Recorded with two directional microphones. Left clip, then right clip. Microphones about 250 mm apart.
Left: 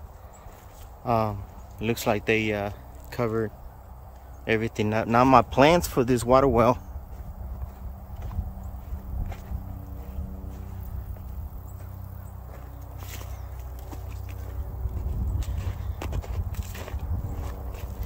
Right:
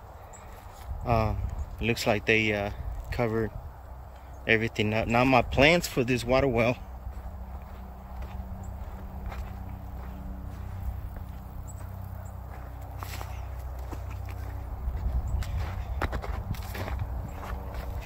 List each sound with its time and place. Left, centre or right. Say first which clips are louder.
1.0 s speech: left 3 dB; centre
16.0 s horse: right 5 dB; centre